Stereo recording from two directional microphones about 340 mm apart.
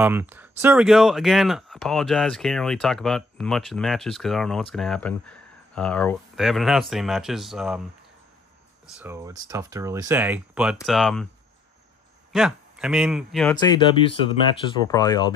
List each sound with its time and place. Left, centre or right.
0.0 s speech: centre
9.0 s speech: centre
12.3 s speech: centre
14.8 s speech: centre